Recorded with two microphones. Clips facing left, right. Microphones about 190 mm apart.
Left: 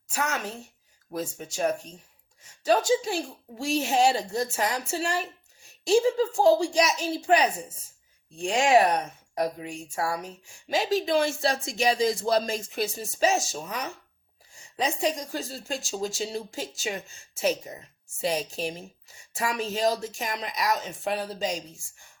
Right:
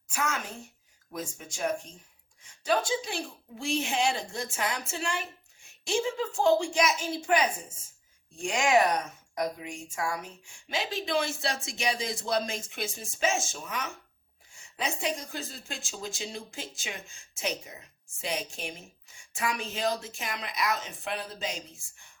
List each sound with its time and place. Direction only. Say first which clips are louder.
0.1 s a woman's voice: left 3 dB; 35° left (ahead or behind)